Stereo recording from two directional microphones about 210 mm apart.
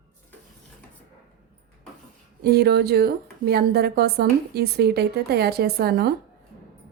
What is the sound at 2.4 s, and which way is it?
A woman's voice, 50° right (ahead or behind).